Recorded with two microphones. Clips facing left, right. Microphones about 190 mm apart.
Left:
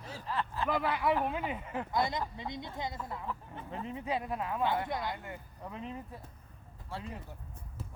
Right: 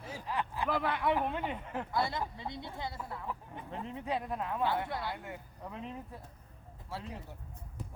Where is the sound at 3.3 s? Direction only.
15° right (ahead or behind).